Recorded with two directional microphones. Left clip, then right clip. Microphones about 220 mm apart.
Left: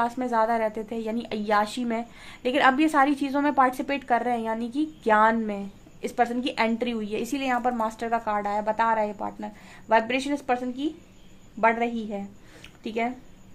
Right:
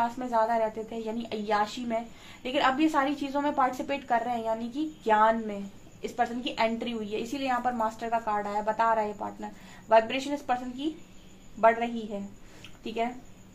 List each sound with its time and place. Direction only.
0.0 s a woman's voice: 45° left (ahead or behind)